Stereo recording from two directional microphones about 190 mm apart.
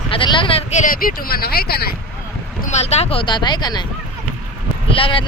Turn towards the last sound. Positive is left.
turn(degrees=30)  # may be behind; listen again after turning